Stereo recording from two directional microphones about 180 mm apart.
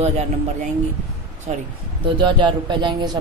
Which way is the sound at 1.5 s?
40° right (ahead or behind).